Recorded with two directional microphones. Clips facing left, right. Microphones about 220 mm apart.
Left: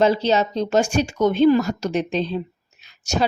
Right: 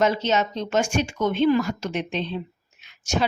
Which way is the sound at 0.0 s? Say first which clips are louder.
Left 4 dB; 35° left (ahead or behind).